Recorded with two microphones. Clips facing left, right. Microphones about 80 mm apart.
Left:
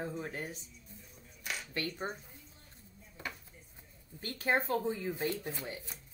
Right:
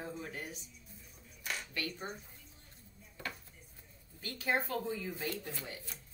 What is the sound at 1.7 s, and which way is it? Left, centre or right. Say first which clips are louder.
Speech: left 6 dB; left.